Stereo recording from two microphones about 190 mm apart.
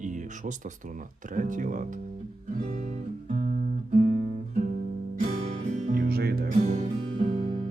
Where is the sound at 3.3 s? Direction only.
50° right (ahead or behind).